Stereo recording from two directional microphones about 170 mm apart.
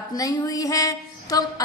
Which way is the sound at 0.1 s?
20° left (ahead or behind).